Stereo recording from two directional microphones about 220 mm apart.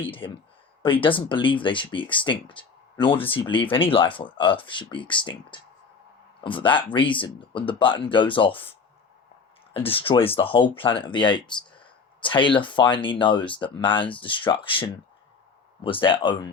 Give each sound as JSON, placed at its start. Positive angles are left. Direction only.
{"t": 0.0, "sound": "speech", "side_deg": 25}
{"t": 9.7, "sound": "speech", "side_deg": 25}